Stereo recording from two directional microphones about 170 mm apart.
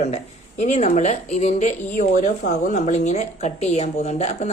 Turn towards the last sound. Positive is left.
turn(degrees=40)  # may be behind; listen again after turning